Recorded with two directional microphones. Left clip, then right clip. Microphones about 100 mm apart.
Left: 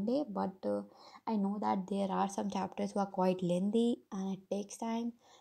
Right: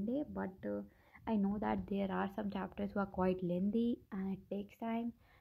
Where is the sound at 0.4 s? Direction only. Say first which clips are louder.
Left 6 dB; 35° left (ahead or behind).